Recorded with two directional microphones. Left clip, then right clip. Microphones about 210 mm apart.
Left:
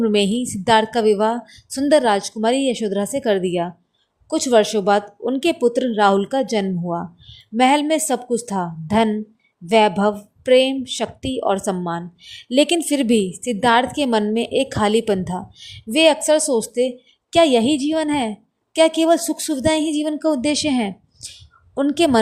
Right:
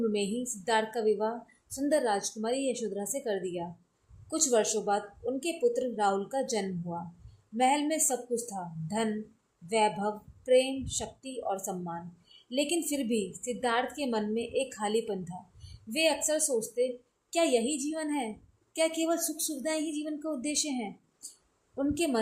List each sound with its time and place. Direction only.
0.0 s a woman's voice: 40° left (ahead or behind)